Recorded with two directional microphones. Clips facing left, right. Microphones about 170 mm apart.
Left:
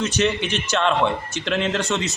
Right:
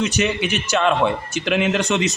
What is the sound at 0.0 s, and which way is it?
A man's voice, 10° right (ahead or behind).